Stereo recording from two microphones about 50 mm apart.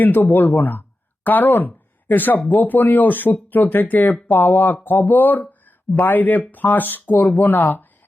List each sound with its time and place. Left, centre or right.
0.0 s speech: left